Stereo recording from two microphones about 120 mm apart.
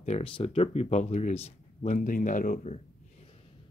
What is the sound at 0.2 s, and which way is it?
Speech, 50° left (ahead or behind).